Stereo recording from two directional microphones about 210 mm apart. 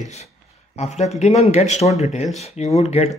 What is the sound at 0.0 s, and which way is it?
Speech, 30° left (ahead or behind).